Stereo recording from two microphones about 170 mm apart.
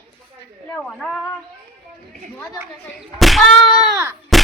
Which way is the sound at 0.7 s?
5° left (ahead or behind).